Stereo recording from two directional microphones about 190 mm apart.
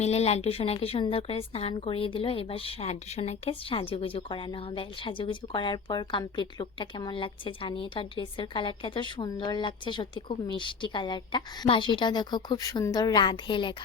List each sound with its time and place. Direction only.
0.0 s speech: 35° left (ahead or behind)